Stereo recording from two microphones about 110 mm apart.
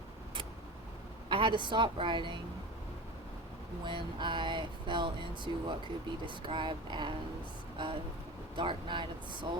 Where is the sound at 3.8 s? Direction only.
45° right (ahead or behind).